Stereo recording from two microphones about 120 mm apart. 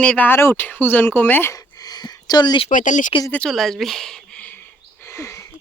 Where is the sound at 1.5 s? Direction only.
30° left (ahead or behind).